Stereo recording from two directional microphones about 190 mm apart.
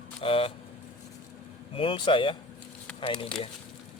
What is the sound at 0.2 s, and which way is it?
Speech, 30° left (ahead or behind).